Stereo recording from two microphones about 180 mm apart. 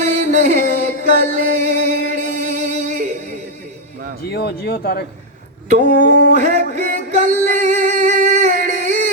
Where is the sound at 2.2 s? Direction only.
45° right (ahead or behind).